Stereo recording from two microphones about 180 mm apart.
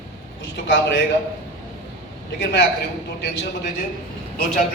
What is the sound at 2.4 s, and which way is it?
Speech, 70° left (ahead or behind).